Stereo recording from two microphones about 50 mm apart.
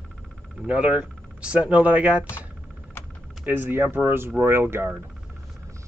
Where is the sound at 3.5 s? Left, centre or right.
Right.